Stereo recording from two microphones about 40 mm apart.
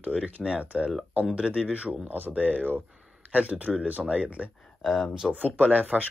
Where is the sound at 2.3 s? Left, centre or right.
Right.